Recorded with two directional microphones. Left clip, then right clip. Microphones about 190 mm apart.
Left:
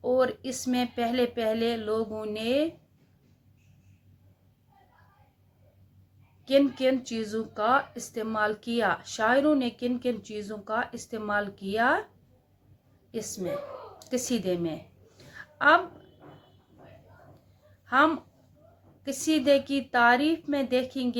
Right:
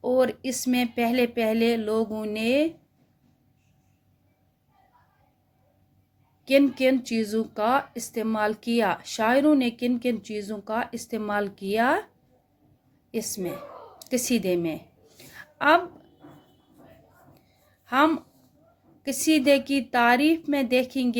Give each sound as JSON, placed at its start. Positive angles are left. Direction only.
{"t": 0.0, "sound": "speech", "side_deg": -35}
{"t": 6.4, "sound": "speech", "side_deg": -40}
{"t": 13.1, "sound": "a woman's voice", "side_deg": -35}
{"t": 15.4, "sound": "a sound", "side_deg": -40}
{"t": 17.8, "sound": "speech", "side_deg": -40}